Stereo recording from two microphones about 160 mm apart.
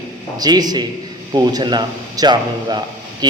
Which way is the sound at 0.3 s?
25° right (ahead or behind).